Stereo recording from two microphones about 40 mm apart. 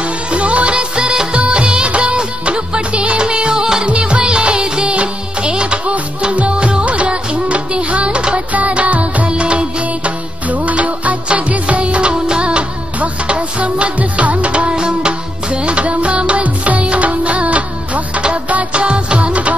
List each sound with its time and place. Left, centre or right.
0.0 s music: right
8.5 s music: right
9.3 s music: right